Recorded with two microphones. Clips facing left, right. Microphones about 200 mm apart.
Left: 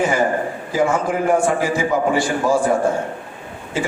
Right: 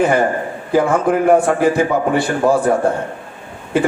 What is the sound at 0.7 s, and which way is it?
A man's voice, 60° right (ahead or behind).